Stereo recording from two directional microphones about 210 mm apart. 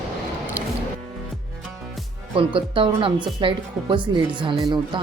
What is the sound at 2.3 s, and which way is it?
Speech, 25° right (ahead or behind).